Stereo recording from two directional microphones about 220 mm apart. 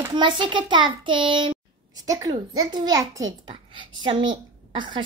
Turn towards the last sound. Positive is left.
turn(degrees=-20)  # may be behind; listen again after turning